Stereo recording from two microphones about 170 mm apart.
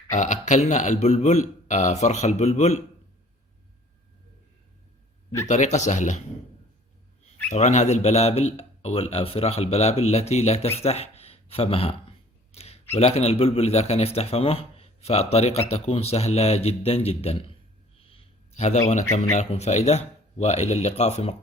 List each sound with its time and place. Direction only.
0.1 s a man's voice: 45° left (ahead or behind)
5.5 s a man's voice: 45° left (ahead or behind)
7.5 s a man's voice: 45° left (ahead or behind)
18.1 s a sound: 40° left (ahead or behind)
19.1 s a man's voice: 40° left (ahead or behind)